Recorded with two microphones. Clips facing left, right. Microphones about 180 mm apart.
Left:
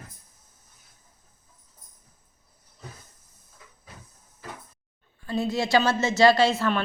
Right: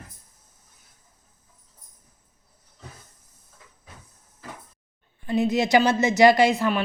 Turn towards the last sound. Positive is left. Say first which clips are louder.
# right 2 dB
turn(degrees=-15)  # may be behind; listen again after turning